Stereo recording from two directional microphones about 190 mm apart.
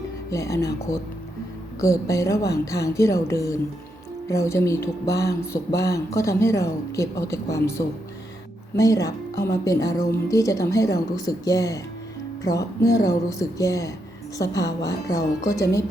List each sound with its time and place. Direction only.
0.3 s speech: 15° left (ahead or behind)
1.8 s speech: 15° left (ahead or behind)
8.7 s speech: 15° left (ahead or behind)